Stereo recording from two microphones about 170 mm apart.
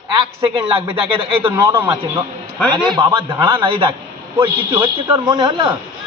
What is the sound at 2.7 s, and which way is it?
A man's voice, 25° right (ahead or behind).